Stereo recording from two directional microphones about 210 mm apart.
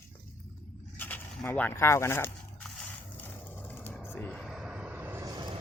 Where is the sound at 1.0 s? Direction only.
10° left (ahead or behind).